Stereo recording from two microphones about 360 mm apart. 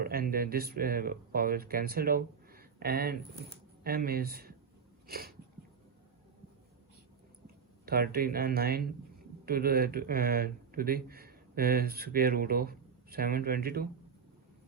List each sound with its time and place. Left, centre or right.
0.0 s speech: right
5.0 s a sound: right
7.4 s speech: right